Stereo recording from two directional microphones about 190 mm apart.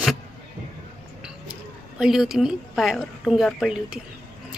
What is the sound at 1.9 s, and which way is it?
A woman's voice, centre (ahead or behind).